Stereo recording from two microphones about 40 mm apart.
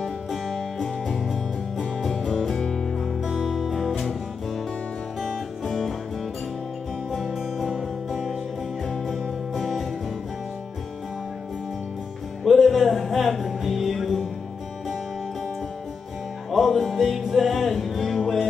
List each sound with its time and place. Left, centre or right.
0.0 s music: centre
2.0 s music: centre
2.6 s music: centre
3.5 s music: centre
5.7 s music: centre
7.7 s music: centre
9.6 s music: centre
12.4 s music: centre
16.4 s music: centre